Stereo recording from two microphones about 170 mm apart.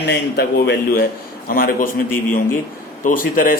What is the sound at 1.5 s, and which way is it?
Speech, 60° left (ahead or behind).